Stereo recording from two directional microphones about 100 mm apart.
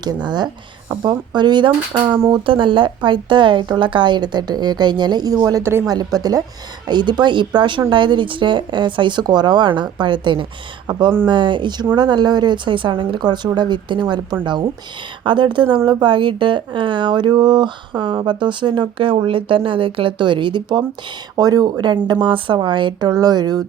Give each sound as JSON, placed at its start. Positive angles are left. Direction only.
{"t": 0.0, "sound": "speech", "side_deg": -45}
{"t": 15.2, "sound": "speech", "side_deg": -55}
{"t": 21.3, "sound": "speech", "side_deg": -40}